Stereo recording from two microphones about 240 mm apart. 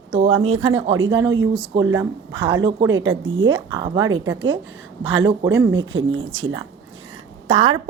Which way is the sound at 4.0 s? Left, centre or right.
Right.